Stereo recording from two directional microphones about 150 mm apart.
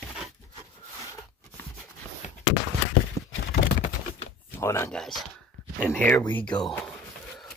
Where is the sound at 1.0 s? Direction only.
20° left (ahead or behind).